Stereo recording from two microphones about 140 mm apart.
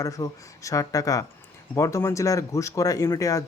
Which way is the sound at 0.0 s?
25° left (ahead or behind).